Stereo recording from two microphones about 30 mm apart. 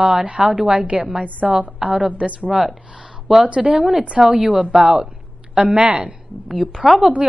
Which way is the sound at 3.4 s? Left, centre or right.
Right.